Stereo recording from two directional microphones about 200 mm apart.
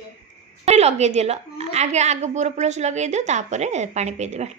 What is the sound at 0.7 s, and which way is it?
A woman's voice, 35° right (ahead or behind).